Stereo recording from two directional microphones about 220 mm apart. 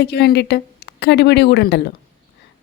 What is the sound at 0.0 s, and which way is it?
A woman's voice, 50° left (ahead or behind).